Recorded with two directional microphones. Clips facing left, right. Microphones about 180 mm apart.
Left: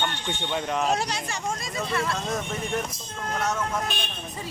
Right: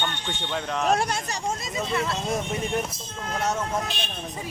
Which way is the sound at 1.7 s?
20° right (ahead or behind).